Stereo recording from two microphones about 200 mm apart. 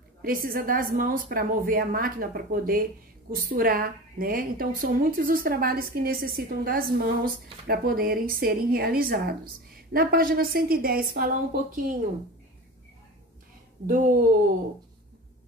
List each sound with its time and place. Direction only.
0.2 s a woman's voice: 45° right (ahead or behind)
13.8 s speech: 40° right (ahead or behind)